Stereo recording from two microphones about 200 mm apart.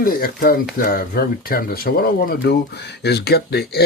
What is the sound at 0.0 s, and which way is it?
Speech, 45° left (ahead or behind).